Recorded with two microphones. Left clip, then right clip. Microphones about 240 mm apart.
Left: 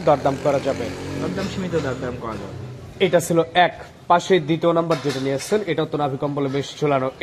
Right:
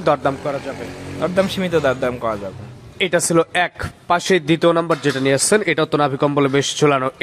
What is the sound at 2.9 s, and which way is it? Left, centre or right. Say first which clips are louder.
Speech: right 1 dB; right.